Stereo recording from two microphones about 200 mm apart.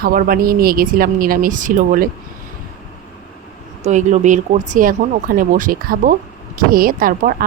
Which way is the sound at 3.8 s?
35° right (ahead or behind).